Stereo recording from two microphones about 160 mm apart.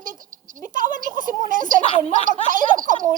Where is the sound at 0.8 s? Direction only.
55° right (ahead or behind).